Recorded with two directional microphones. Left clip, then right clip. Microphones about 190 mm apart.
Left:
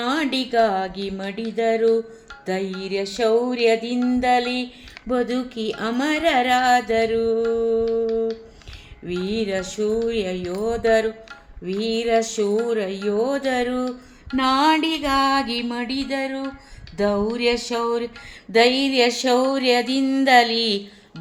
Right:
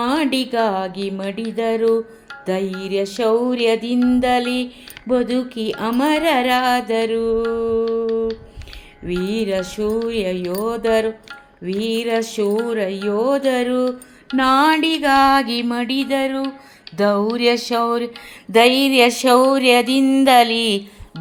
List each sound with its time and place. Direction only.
0.0 s music: 20° right (ahead or behind)